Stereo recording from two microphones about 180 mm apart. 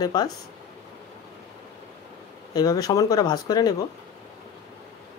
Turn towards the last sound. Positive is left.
turn(degrees=20)  # may be behind; listen again after turning